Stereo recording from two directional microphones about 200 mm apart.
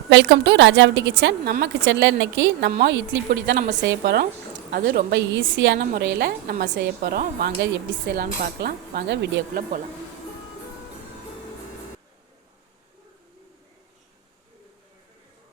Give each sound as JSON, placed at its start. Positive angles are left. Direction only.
{"t": 0.1, "sound": "a woman's voice", "side_deg": -65}
{"t": 8.0, "sound": "a woman's voice", "side_deg": -50}